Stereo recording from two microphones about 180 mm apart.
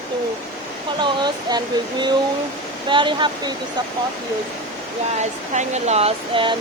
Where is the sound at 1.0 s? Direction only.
25° right (ahead or behind).